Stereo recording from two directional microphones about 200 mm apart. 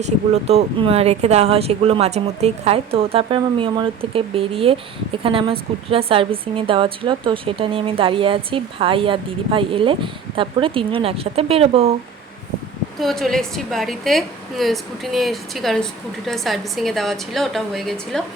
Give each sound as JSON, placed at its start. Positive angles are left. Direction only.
{"t": 0.0, "sound": "a woman's voice", "side_deg": -30}
{"t": 13.0, "sound": "a woman's voice", "side_deg": 0}